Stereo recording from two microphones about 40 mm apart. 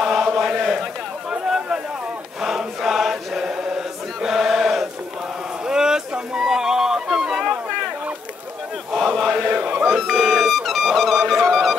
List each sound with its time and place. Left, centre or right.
0.0 s chant: centre
1.3 s a sound: centre
2.4 s chant: centre
5.7 s music: centre
9.2 s chant: centre
9.8 s music: centre